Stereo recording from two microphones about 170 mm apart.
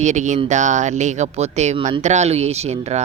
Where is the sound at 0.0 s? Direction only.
45° right (ahead or behind).